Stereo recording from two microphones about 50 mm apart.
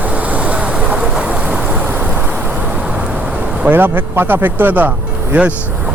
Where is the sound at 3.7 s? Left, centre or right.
Right.